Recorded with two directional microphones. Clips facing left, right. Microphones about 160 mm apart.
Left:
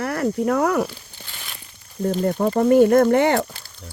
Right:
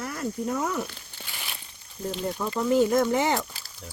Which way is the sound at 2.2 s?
50° left (ahead or behind).